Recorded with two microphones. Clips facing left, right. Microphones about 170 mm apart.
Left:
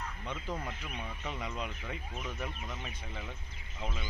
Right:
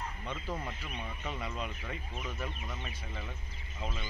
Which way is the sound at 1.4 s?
15° left (ahead or behind).